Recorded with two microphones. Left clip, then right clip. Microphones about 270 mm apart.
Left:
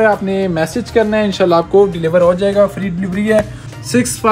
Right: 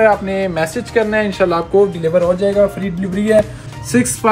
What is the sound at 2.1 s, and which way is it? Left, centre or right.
Speech, centre.